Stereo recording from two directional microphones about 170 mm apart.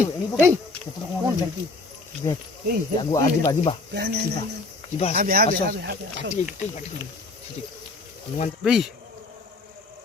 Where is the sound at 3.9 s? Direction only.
80° right.